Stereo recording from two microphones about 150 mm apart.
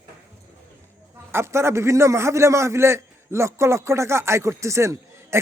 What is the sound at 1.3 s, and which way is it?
A man's voice, 15° right (ahead or behind).